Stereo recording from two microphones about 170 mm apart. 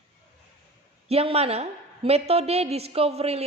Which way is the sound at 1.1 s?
35° right (ahead or behind).